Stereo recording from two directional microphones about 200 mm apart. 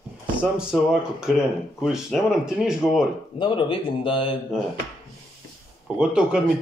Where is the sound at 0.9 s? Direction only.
5° right (ahead or behind).